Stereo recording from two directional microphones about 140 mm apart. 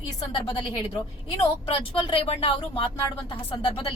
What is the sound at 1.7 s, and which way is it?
A woman's voice, 40° left (ahead or behind).